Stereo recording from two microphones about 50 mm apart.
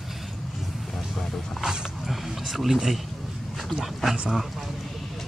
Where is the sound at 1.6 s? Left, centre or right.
Centre.